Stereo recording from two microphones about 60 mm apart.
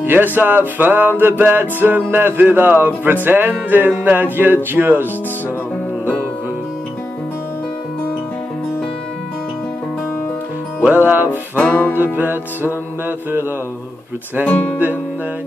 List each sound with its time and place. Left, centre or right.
0.0 s music: right
10.8 s music: right
11.5 s music: left